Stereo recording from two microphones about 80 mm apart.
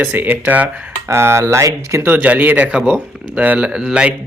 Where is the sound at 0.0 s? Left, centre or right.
Right.